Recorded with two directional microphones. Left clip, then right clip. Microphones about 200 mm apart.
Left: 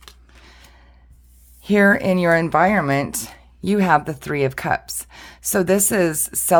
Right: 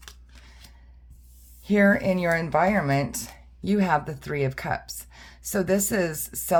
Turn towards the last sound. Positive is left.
turn(degrees=45)  # may be behind; listen again after turning